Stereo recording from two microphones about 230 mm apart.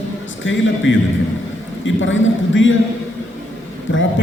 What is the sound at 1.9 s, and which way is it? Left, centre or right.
Speech, left.